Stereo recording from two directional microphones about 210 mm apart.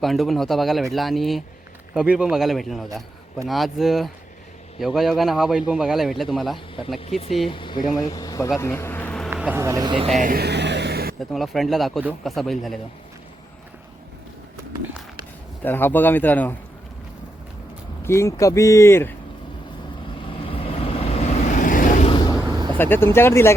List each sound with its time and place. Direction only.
0.0 s speech: centre (ahead or behind)
7.5 s speech: 25° left (ahead or behind)
8.5 s bee: 10° left (ahead or behind)
9.3 s speech: 10° right (ahead or behind)
10.2 s a sound: 45° right (ahead or behind)
11.3 s speech: centre (ahead or behind)
15.6 s speech: 10° left (ahead or behind)
18.0 s speech: 15° left (ahead or behind)
20.5 s vehicle: 25° left (ahead or behind)
22.4 s vehicle: 15° right (ahead or behind)
22.8 s speech: 10° left (ahead or behind)